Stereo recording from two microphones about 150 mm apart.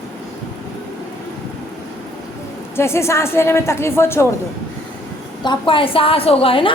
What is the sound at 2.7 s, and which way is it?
A woman's voice, 15° left (ahead or behind).